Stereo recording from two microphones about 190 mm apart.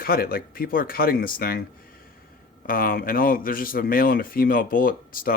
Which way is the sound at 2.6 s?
50° left (ahead or behind).